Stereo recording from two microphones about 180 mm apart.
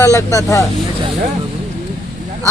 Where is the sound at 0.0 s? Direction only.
15° left (ahead or behind).